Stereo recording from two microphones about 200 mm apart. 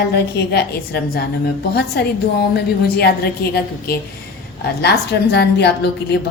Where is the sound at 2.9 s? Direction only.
50° left (ahead or behind).